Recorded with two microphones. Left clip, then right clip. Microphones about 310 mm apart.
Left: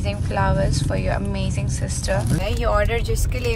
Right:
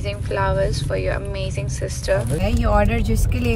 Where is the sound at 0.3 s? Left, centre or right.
Centre.